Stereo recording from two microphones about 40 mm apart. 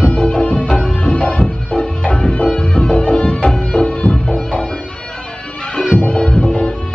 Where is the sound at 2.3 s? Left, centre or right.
Left.